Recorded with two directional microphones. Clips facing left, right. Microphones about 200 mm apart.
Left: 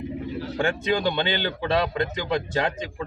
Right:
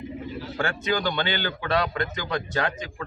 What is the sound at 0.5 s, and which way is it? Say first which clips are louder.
A man's voice: left 2 dB; 20° left (ahead or behind).